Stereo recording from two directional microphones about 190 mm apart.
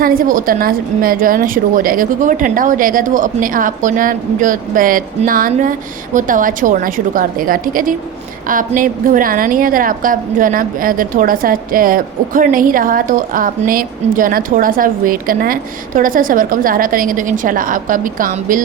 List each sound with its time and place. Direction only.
0.0 s a woman's voice: 45° right (ahead or behind)